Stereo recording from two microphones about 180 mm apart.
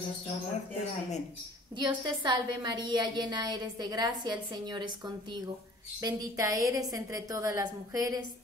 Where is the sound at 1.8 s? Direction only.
25° right (ahead or behind).